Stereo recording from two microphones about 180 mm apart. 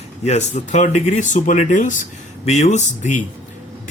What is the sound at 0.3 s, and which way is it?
A man's voice, 40° left (ahead or behind).